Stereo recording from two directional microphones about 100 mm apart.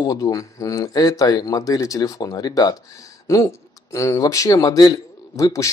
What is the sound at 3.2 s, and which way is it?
Speech, 35° left (ahead or behind).